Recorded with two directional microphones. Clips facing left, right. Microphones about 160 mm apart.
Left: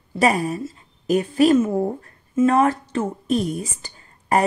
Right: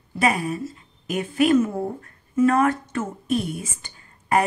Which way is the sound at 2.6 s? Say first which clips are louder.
Left 2 dB; 30° left (ahead or behind).